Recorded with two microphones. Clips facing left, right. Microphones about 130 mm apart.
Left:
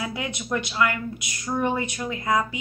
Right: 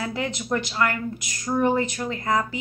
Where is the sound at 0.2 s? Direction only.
40° right (ahead or behind).